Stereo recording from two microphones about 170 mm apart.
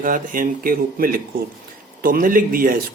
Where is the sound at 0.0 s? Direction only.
55° right (ahead or behind).